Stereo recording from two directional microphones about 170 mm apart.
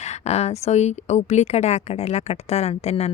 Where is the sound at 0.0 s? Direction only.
40° left (ahead or behind).